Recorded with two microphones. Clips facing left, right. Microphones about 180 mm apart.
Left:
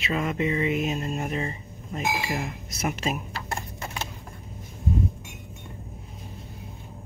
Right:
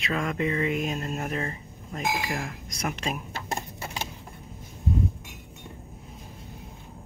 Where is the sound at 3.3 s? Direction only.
15° right (ahead or behind).